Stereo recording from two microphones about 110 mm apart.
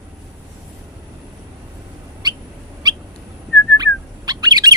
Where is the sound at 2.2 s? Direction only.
35° right (ahead or behind).